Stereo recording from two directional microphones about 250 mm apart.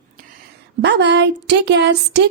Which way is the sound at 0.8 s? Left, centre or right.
Right.